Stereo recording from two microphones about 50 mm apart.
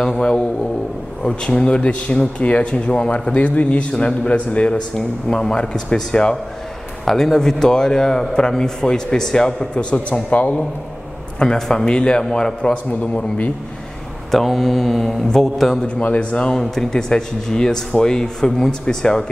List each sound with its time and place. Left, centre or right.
0.0 s speech: centre
3.3 s speech: left; by 9.7 s centre
9.8 s speech: left
11.4 s speech: centre
14.3 s speech: centre
15.9 s speech: left
16.5 s speech: centre